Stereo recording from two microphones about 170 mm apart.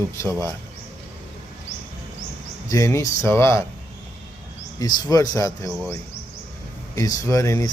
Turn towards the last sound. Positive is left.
turn(degrees=20)  # may be behind; listen again after turning